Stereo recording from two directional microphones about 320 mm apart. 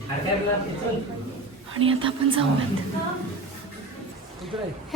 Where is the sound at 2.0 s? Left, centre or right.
Centre.